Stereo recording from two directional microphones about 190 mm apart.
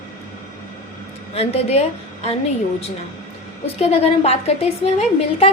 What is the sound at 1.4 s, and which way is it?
Speech, 30° left (ahead or behind).